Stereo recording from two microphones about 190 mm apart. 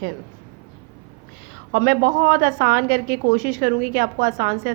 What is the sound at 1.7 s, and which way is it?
A woman's voice, 50° right (ahead or behind).